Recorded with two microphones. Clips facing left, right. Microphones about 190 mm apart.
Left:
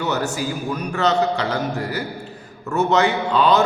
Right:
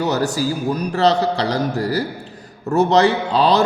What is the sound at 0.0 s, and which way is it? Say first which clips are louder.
A man's voice: right 4 dB; 35° right (ahead or behind).